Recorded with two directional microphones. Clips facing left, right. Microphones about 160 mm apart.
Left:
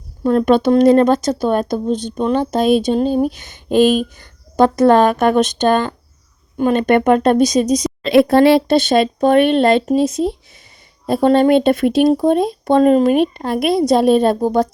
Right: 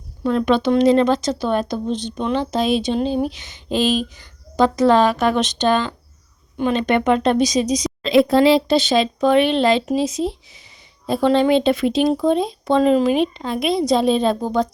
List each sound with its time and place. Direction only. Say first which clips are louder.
0.3 s a woman's voice: left 4 dB; 50° left (ahead or behind)